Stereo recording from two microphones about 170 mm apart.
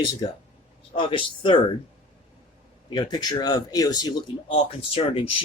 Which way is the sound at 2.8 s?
25° left (ahead or behind).